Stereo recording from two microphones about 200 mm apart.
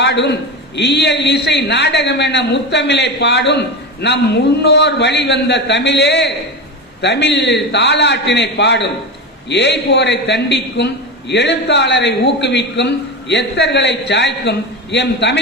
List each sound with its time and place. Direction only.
0.0 s a man's voice: 60° left (ahead or behind)